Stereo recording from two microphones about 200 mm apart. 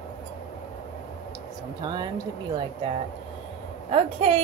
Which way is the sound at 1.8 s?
20° right (ahead or behind).